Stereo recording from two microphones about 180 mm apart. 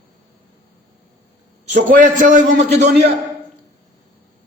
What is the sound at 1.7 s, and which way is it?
Speech, 45° right (ahead or behind).